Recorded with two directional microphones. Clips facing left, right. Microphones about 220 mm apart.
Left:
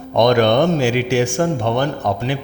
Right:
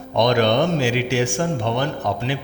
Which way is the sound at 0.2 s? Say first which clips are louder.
Left 4 dB; 55° left (ahead or behind).